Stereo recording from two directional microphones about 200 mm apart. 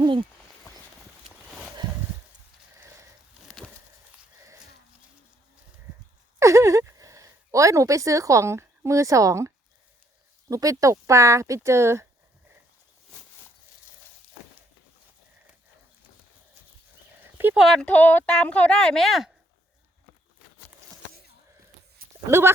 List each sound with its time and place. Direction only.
0.0 s speech: 25° right (ahead or behind)
2.8 s a sound: 15° right (ahead or behind)
6.4 s a sound: 15° right (ahead or behind)
10.5 s speech: 15° right (ahead or behind)
17.3 s speech: 5° right (ahead or behind)
22.3 s speech: 10° right (ahead or behind)